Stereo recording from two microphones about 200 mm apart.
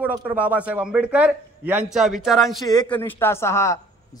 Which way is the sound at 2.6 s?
20° left (ahead or behind).